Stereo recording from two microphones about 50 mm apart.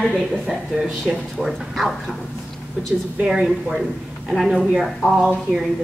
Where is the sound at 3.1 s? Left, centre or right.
Centre.